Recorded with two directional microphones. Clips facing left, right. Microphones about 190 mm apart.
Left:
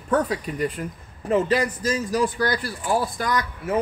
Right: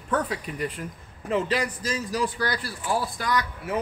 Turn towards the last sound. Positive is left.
turn(degrees=45)  # may be behind; listen again after turning